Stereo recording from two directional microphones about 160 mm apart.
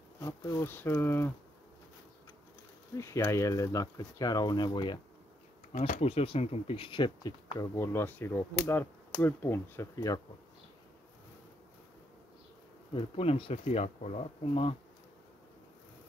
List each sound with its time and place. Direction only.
0.2 s speech: 20° left (ahead or behind)
3.0 s speech: 15° left (ahead or behind)
5.7 s speech: 45° left (ahead or behind); by 7.6 s 30° left (ahead or behind)
7.7 s speech: 15° left (ahead or behind)
12.9 s speech: 40° left (ahead or behind)